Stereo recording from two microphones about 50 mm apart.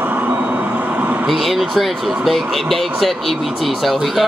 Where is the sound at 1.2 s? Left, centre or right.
Centre.